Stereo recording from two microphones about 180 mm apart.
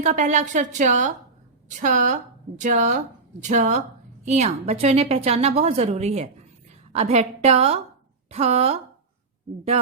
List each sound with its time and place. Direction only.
0.0 s a woman's voice: 40° right (ahead or behind)